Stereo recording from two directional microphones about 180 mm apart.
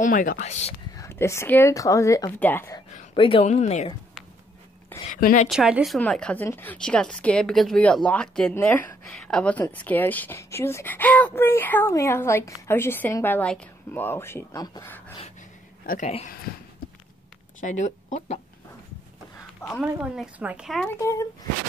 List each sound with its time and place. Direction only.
0.0 s speech: 50° left (ahead or behind)
0.9 s a woman's voice: 15° left (ahead or behind)
3.2 s speech: 30° left (ahead or behind)
5.1 s speech: 45° left (ahead or behind)
5.5 s a woman's voice: 5° right (ahead or behind); by 14.9 s 20° left (ahead or behind)
15.8 s speech: 55° left (ahead or behind)
17.6 s speech: 45° left (ahead or behind)
19.8 s speech: 10° right (ahead or behind)
21.0 s a woman's voice: 15° left (ahead or behind)